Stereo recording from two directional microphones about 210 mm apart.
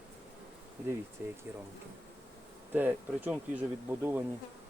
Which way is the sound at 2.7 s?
10° right (ahead or behind).